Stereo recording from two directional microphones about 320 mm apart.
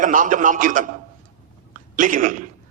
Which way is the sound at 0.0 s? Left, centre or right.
Right.